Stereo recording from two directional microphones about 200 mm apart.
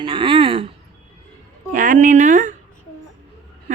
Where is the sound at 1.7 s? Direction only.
40° right (ahead or behind).